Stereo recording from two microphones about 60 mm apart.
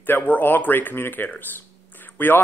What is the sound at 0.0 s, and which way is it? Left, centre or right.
Speech, left.